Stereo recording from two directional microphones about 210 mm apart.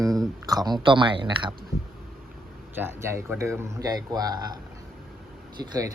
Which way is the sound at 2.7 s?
10° right (ahead or behind).